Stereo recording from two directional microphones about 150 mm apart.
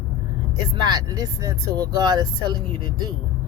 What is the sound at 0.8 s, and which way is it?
Speech, 25° right (ahead or behind).